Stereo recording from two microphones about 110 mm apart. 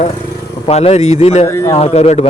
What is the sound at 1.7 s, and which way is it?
Speech, 65° left (ahead or behind).